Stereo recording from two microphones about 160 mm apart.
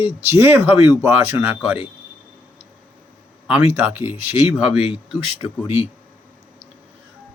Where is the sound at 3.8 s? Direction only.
15° right (ahead or behind).